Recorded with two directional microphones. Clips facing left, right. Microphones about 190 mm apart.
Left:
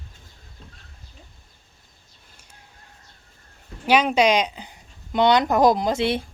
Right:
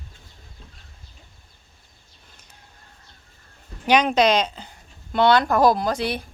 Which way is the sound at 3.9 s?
5° left (ahead or behind).